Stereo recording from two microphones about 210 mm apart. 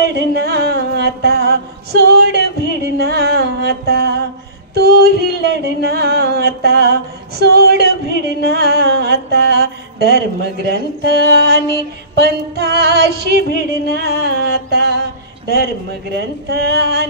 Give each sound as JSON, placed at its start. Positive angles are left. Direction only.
{"t": 0.0, "sound": "music", "side_deg": -50}
{"t": 4.7, "sound": "a sound", "side_deg": -50}
{"t": 12.2, "sound": "speech", "side_deg": -50}